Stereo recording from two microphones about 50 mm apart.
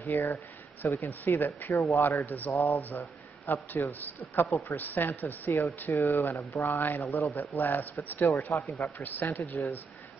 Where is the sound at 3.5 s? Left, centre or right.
Left.